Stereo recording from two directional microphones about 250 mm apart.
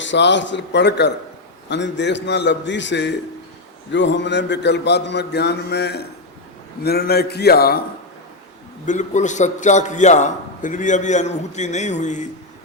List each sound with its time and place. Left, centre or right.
0.0 s a sound: left
6.8 s a man's voice: left
8.9 s a man's voice: left